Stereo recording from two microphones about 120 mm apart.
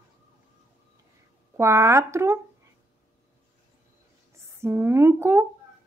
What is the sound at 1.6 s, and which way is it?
Speech, 25° right (ahead or behind).